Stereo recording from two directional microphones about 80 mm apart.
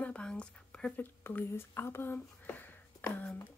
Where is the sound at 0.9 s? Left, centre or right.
Left.